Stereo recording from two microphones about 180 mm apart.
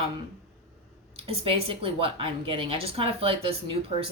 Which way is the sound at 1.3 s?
30° right (ahead or behind).